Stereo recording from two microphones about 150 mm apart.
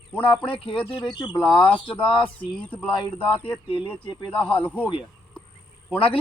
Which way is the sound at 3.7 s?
35° left (ahead or behind).